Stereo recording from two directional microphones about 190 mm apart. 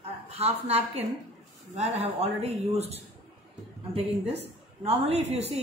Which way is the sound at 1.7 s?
35° right (ahead or behind).